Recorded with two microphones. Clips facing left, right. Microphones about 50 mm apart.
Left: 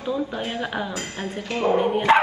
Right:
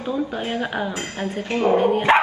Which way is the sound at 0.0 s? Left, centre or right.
Right.